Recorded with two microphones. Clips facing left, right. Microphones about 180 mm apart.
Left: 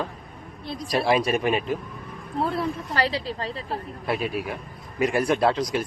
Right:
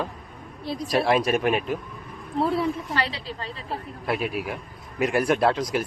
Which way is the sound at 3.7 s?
Centre (ahead or behind).